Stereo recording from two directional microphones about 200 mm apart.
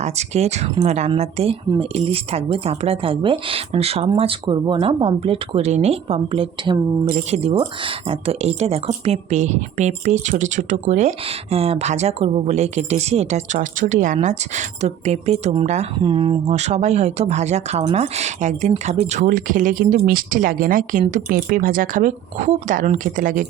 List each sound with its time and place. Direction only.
0.0 s speech: 35° right (ahead or behind)